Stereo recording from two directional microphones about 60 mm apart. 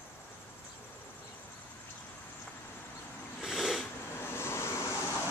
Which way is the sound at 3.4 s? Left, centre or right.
Centre.